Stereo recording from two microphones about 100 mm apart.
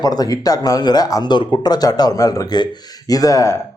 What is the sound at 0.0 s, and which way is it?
Speech, 40° left (ahead or behind).